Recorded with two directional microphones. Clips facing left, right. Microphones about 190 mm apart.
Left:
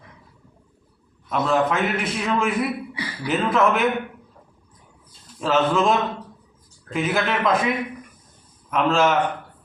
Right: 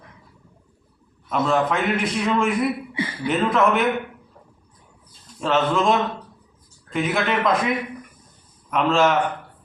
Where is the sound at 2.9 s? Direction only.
25° right (ahead or behind).